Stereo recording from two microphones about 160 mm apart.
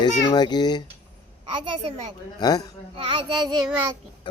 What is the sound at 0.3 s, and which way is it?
Speech, 25° left (ahead or behind).